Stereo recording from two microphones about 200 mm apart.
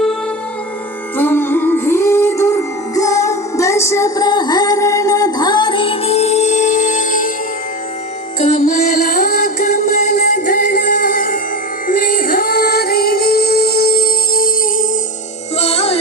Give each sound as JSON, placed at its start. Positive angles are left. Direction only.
{"t": 1.1, "sound": "music", "side_deg": 10}
{"t": 8.4, "sound": "music", "side_deg": 35}
{"t": 15.5, "sound": "music", "side_deg": 30}